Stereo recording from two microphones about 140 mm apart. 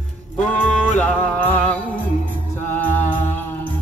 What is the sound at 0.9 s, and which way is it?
Music, 10° left (ahead or behind).